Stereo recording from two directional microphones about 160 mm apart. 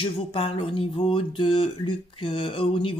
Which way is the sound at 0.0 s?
35° left (ahead or behind).